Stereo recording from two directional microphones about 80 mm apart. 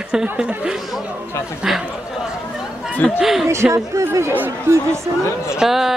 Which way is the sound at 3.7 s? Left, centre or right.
Right.